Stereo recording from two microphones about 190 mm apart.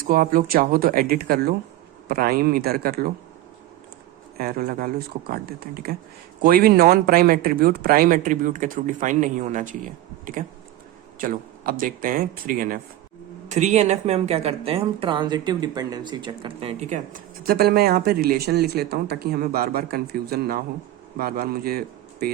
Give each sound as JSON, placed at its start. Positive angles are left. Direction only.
{"t": 0.1, "sound": "speech", "side_deg": -50}
{"t": 4.4, "sound": "a man's voice", "side_deg": -50}